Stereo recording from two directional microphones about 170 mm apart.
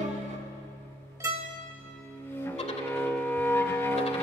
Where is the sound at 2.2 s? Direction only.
10° left (ahead or behind).